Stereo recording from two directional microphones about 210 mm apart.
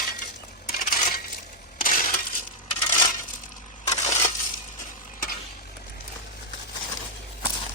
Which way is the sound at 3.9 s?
35° left (ahead or behind).